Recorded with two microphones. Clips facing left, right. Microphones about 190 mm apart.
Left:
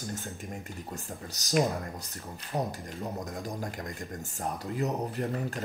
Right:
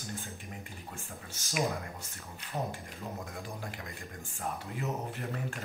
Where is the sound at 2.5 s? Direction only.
35° left (ahead or behind).